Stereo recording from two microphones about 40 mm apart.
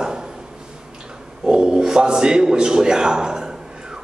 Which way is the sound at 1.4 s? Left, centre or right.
Right.